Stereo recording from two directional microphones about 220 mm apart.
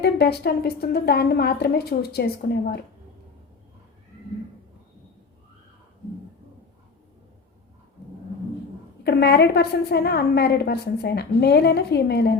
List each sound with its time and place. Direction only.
0.0 s a woman's voice: 45° left (ahead or behind)
9.0 s a woman's voice: 50° left (ahead or behind)